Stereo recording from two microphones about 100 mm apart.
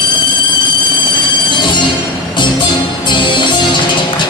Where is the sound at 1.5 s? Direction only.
50° left (ahead or behind).